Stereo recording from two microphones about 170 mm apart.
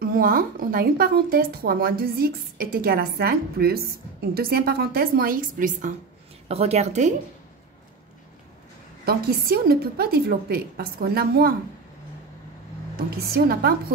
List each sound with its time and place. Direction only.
0.0 s a woman's voice: 60° right (ahead or behind)
6.5 s a woman's voice: 40° right (ahead or behind)
9.0 s a woman's voice: 60° right (ahead or behind)
12.9 s a woman's voice: 65° right (ahead or behind)